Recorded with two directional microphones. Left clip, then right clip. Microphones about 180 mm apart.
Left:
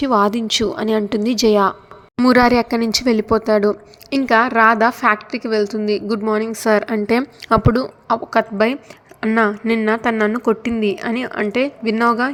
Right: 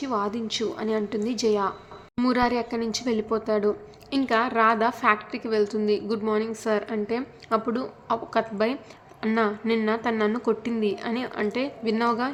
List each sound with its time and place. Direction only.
0.0 s a woman's voice: 45° left (ahead or behind)